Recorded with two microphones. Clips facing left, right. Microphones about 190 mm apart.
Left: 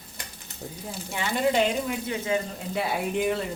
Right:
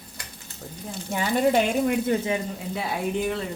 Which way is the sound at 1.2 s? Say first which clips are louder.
Right 3 dB; 55° right (ahead or behind).